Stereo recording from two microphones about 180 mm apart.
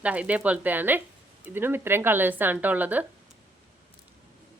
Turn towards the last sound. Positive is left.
turn(degrees=-10)  # may be behind; listen again after turning